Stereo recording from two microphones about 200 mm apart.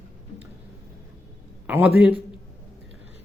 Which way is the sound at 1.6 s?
10° right (ahead or behind).